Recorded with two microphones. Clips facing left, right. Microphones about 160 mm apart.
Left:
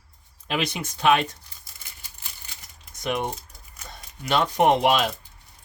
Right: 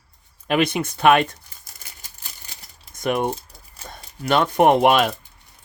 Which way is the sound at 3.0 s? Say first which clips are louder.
Right 5 dB; 55° right (ahead or behind).